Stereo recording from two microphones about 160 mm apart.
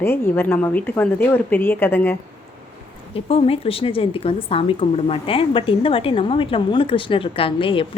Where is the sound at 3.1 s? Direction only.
35° left (ahead or behind).